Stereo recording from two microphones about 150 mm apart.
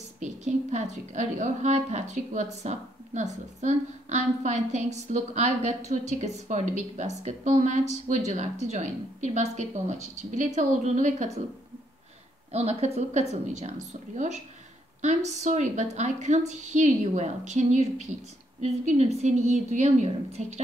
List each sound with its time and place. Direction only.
0.2 s a woman's voice: 50° right (ahead or behind)
12.5 s a woman's voice: 45° right (ahead or behind)